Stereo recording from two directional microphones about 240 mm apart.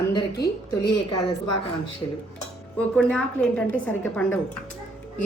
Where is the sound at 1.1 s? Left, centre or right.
Left.